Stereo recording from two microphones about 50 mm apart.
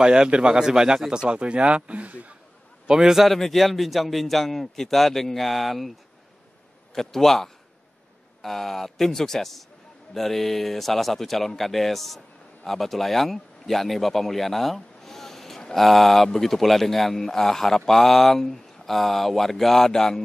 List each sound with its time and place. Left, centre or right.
0.0 s speech: centre
2.9 s speech: centre
3.3 s speech: centre
7.0 s a man's voice: centre